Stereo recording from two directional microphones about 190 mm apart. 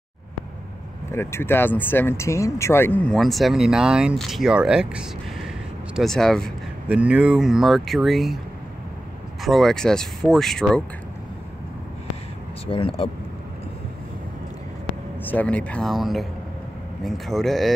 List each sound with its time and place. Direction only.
1.1 s speech: 15° left (ahead or behind)
9.4 s speech: centre (ahead or behind)
12.6 s speech: 30° left (ahead or behind)
15.2 s speech: 10° left (ahead or behind)